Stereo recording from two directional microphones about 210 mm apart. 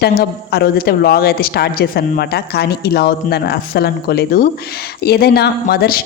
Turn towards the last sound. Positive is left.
turn(degrees=45)  # may be behind; listen again after turning